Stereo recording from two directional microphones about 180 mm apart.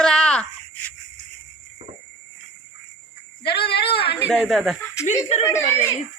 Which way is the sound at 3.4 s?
65° left (ahead or behind).